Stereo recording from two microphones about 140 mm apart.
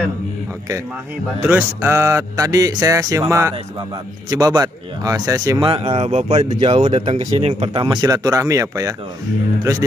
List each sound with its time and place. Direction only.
1.4 s speech: 15° right (ahead or behind)
5.7 s speech: 40° right (ahead or behind)
7.8 s speech: 30° right (ahead or behind)